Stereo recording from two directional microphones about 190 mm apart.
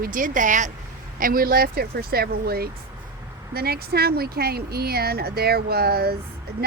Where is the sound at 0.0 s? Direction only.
45° right (ahead or behind).